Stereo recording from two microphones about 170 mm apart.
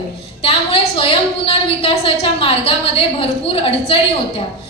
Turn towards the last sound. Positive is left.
turn(degrees=30)  # may be behind; listen again after turning